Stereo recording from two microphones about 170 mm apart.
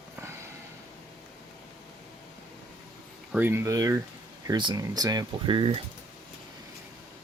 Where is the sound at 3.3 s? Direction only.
15° right (ahead or behind); by 5.8 s 30° right (ahead or behind).